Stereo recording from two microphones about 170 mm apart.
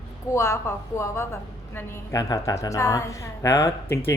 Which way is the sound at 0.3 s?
20° left (ahead or behind).